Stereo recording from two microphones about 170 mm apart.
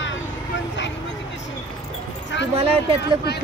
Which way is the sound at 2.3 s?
90° left.